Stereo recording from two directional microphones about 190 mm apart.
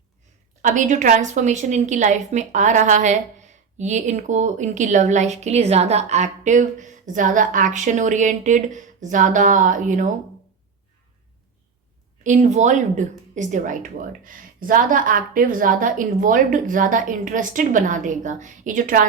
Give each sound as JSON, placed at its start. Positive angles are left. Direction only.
{"t": 0.6, "sound": "a woman's voice", "side_deg": -40}
{"t": 12.2, "sound": "a woman's voice", "side_deg": -40}